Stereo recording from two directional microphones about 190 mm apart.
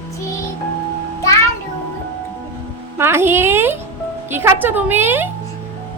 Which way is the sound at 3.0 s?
10° right (ahead or behind).